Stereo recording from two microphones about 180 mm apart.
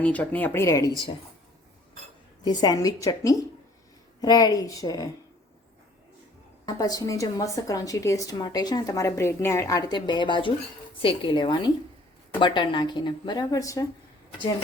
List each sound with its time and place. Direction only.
0.0 s speech: 10° left (ahead or behind)
2.4 s a woman's voice: 25° left (ahead or behind)
6.7 s a woman's voice: 20° left (ahead or behind)